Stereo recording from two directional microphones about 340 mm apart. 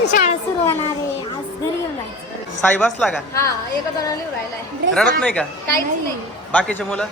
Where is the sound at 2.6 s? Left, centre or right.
Centre.